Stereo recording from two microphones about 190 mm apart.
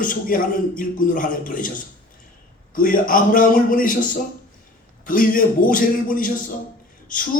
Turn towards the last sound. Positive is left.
turn(degrees=45)  # may be behind; listen again after turning